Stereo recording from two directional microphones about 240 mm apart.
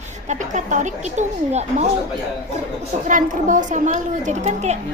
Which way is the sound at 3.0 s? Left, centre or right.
Right.